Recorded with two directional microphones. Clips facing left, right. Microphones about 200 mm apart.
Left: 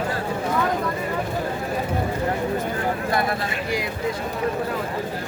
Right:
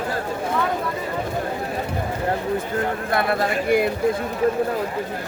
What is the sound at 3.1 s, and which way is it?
Speech, 55° right (ahead or behind).